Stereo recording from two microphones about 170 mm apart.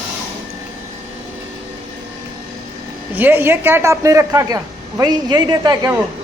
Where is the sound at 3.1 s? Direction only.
10° right (ahead or behind).